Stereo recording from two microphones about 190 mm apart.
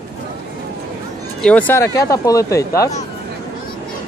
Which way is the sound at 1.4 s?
5° left (ahead or behind).